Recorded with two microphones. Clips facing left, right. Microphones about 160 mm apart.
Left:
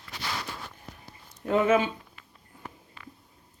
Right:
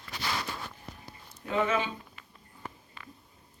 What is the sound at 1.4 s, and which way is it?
Speech, 50° left (ahead or behind).